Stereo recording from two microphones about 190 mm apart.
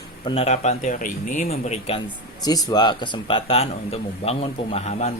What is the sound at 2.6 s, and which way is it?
Speech, 20° left (ahead or behind).